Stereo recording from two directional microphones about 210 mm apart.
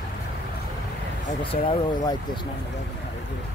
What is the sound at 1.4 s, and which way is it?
Speech, 25° left (ahead or behind).